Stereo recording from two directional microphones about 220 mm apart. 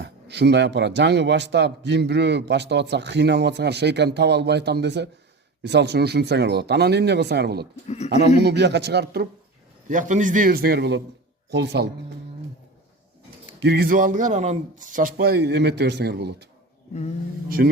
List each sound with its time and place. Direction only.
0.0 s a man's voice: 50° right (ahead or behind)
7.9 s speech: 30° left (ahead or behind)
8.4 s a man's voice: 50° right (ahead or behind)
9.9 s a man's voice: 35° right (ahead or behind)
13.6 s a man's voice: 45° right (ahead or behind)
17.6 s a man's voice: 45° right (ahead or behind)